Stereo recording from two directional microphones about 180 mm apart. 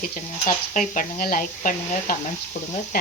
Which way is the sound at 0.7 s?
45° left (ahead or behind).